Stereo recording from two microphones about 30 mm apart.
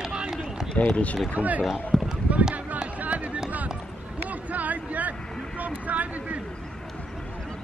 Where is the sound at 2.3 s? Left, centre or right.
Right.